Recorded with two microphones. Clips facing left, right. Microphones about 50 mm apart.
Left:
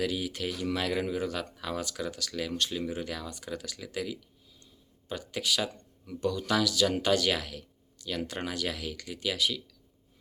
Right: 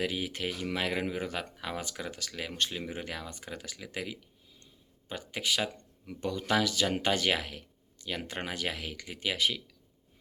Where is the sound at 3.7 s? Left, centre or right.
Right.